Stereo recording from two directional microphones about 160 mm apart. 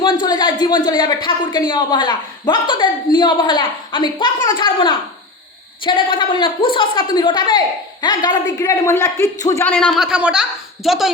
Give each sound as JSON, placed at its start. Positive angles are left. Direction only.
{"t": 0.0, "sound": "a woman's voice", "side_deg": 30}
{"t": 9.9, "sound": "speech", "side_deg": -5}